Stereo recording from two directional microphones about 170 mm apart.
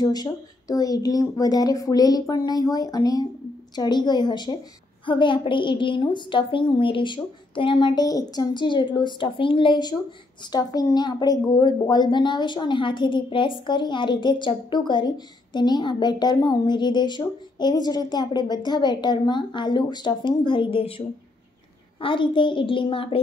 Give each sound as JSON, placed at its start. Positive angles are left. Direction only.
{"t": 0.0, "sound": "a woman's voice", "side_deg": 25}
{"t": 22.0, "sound": "a woman's voice", "side_deg": 30}